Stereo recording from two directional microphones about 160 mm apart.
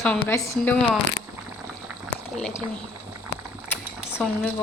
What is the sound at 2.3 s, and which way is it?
Speech, 5° left (ahead or behind).